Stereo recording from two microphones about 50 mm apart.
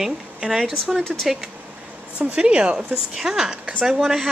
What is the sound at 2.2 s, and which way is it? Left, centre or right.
Speech, right.